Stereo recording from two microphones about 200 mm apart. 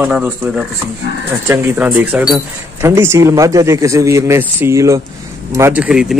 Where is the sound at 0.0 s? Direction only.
5° right (ahead or behind).